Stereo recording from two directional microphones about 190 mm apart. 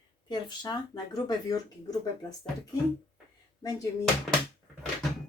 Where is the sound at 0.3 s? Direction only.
20° left (ahead or behind).